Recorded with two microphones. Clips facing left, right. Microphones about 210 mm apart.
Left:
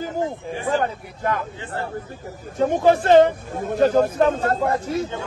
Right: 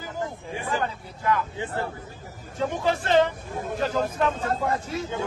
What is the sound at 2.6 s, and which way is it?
Speech, 50° left (ahead or behind).